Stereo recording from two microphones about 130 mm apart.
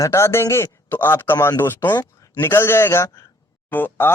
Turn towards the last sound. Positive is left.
turn(degrees=15)  # may be behind; listen again after turning